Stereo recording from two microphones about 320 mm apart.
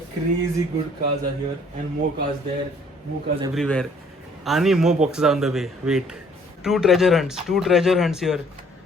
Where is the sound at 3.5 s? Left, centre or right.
Centre.